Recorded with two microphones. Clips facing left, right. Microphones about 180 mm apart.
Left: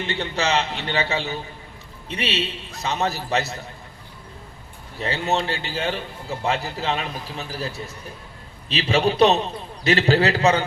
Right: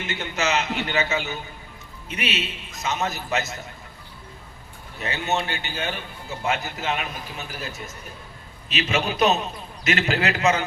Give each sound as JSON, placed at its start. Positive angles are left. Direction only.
{"t": 0.0, "sound": "a man's voice", "side_deg": 35}
{"t": 4.9, "sound": "a man's voice", "side_deg": 30}